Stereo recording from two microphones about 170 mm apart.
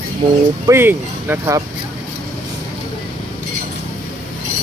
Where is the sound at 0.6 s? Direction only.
15° right (ahead or behind).